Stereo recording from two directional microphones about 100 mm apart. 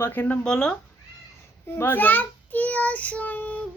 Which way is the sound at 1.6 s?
20° left (ahead or behind).